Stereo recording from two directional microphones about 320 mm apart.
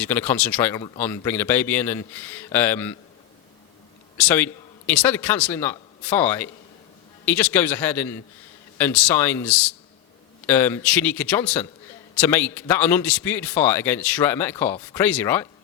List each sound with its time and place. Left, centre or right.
0.0 s a man's voice: centre
4.2 s a man's voice: centre